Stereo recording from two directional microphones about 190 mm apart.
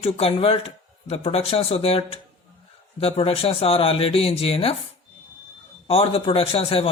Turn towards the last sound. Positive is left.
turn(degrees=30)  # may be behind; listen again after turning